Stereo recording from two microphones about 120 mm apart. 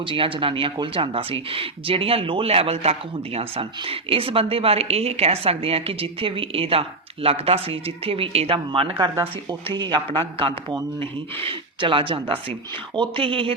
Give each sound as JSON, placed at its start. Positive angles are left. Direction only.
{"t": 0.0, "sound": "speech", "side_deg": -45}